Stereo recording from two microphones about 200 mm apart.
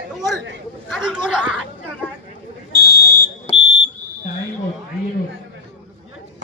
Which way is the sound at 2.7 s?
55° right (ahead or behind).